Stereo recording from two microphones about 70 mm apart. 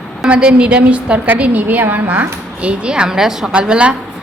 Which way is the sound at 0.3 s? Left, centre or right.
Centre.